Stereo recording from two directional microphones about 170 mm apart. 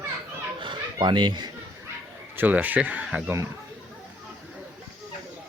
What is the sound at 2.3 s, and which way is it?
Speech, 10° right (ahead or behind).